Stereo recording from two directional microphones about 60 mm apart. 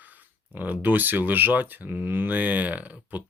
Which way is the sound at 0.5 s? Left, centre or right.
Right.